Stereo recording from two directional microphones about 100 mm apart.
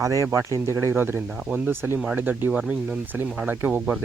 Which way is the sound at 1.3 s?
10° right (ahead or behind).